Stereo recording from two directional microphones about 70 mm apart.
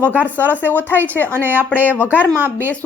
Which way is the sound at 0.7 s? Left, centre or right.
Left.